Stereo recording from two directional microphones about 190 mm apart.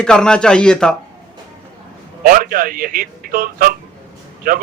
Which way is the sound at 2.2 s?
50° right (ahead or behind).